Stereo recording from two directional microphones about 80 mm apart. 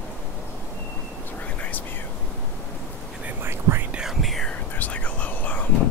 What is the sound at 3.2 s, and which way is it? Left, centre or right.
Whispering, centre.